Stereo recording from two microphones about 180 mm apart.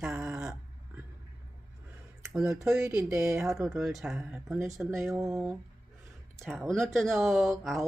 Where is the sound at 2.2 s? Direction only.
5° right (ahead or behind).